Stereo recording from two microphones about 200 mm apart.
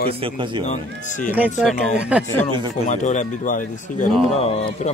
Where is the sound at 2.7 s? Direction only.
35° left (ahead or behind).